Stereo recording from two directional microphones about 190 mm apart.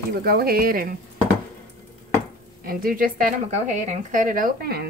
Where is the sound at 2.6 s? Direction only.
50° right (ahead or behind).